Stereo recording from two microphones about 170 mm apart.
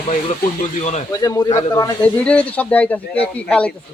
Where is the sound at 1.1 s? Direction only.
20° left (ahead or behind).